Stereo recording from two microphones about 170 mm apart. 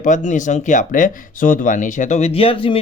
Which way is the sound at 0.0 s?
50° left (ahead or behind).